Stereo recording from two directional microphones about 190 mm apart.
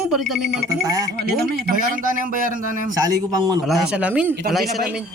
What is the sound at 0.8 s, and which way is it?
Speech, 20° right (ahead or behind).